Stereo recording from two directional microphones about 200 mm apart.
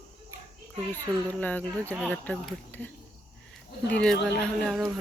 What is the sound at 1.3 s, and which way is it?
Speech, 10° left (ahead or behind).